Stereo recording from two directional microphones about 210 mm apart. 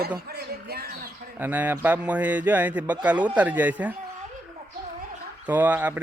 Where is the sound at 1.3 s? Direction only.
10° right (ahead or behind).